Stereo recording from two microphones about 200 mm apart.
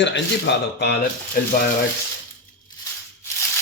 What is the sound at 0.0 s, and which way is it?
Speech, 60° left (ahead or behind).